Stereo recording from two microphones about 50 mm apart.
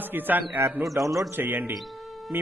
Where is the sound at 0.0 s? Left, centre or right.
Right.